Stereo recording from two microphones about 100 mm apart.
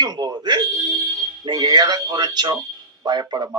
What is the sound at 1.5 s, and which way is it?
A man's voice, 45° right (ahead or behind).